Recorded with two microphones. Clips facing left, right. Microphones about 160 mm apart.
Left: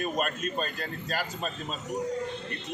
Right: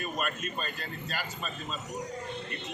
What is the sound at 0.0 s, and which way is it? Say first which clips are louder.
A man's voice: left 4 dB; 40° left (ahead or behind).